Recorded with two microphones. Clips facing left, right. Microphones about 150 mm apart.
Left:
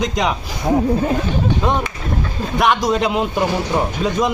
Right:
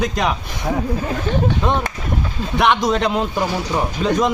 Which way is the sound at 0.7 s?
25° left (ahead or behind).